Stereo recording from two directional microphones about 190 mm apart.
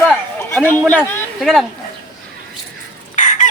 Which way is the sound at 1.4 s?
Centre (ahead or behind).